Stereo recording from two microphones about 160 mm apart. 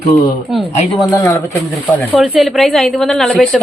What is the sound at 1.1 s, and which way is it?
Speech, 15° left (ahead or behind).